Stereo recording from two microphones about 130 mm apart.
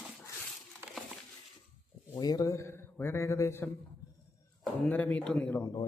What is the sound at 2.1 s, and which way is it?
A man's voice, 30° left (ahead or behind).